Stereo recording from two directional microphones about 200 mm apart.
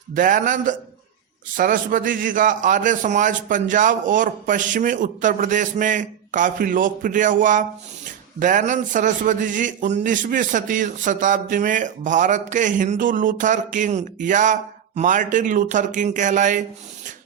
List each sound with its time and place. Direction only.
0.1 s a man's voice: 40° right (ahead or behind)